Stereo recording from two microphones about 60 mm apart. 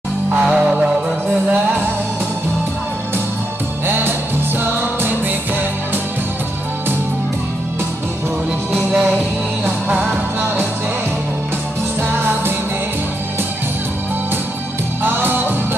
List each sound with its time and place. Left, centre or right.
0.4 s music: centre
1.5 s music: right
3.8 s music: right
8.7 s music: centre
12.0 s music: right
15.0 s music: right